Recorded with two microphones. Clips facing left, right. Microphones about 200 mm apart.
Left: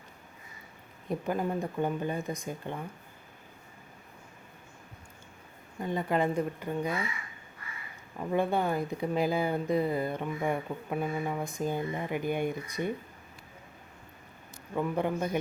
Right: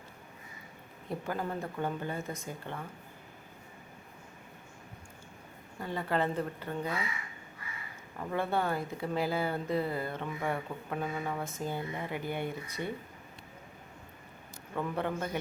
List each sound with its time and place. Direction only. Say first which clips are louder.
1.1 s speech: left 5 dB; 15° left (ahead or behind)
5.8 s speech: left 3 dB; 15° left (ahead or behind)
8.2 s speech: left 4 dB; 15° left (ahead or behind)
14.8 s speech: left 4 dB; 15° left (ahead or behind)